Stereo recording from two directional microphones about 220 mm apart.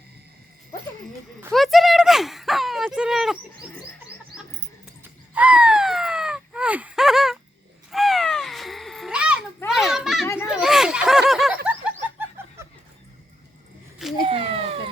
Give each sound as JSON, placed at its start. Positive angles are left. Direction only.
{"t": 1.5, "sound": "speech", "side_deg": 0}
{"t": 5.0, "sound": "a sound", "side_deg": -5}
{"t": 7.9, "sound": "crow", "side_deg": 0}
{"t": 9.6, "sound": "a sound", "side_deg": 0}
{"t": 10.3, "sound": "snicker", "side_deg": 0}
{"t": 12.4, "sound": "laughter", "side_deg": -10}
{"t": 14.3, "sound": "cat", "side_deg": -25}